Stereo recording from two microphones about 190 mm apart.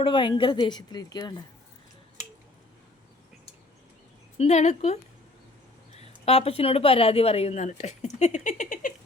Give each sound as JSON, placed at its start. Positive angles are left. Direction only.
{"t": 0.0, "sound": "a woman's voice", "side_deg": 25}
{"t": 4.4, "sound": "a woman's voice", "side_deg": 35}
{"t": 6.0, "sound": "a woman's voice", "side_deg": 35}